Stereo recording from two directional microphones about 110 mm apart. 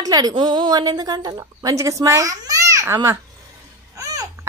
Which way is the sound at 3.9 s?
30° right (ahead or behind).